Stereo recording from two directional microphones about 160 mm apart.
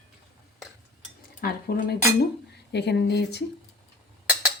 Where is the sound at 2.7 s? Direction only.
90° left.